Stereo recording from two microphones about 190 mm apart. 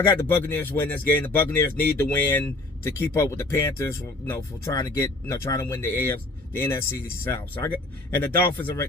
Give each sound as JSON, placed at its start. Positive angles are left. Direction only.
{"t": 0.2, "sound": "speech", "side_deg": 10}
{"t": 8.1, "sound": "speech", "side_deg": 10}